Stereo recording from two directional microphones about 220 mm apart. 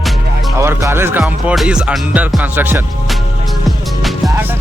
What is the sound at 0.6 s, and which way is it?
Speech, 10° right (ahead or behind).